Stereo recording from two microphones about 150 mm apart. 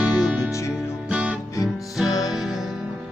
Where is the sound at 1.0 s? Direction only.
5° right (ahead or behind).